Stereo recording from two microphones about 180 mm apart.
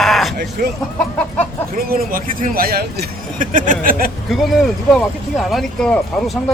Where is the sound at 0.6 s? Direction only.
55° right (ahead or behind).